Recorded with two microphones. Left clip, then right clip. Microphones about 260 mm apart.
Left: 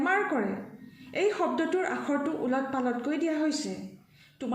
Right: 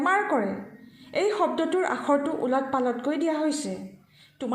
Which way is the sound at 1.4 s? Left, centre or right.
Right.